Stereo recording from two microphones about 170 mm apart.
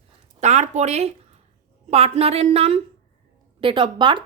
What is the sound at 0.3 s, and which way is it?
A woman's voice, 40° right (ahead or behind).